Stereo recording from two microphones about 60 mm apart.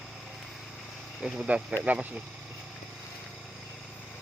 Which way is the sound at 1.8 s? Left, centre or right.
Right.